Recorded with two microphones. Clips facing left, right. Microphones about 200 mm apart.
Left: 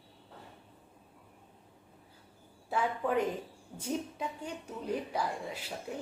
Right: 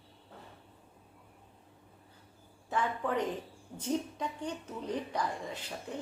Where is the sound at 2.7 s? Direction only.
10° left (ahead or behind).